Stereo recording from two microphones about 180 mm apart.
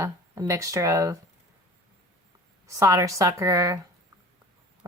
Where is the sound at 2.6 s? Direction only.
15° right (ahead or behind).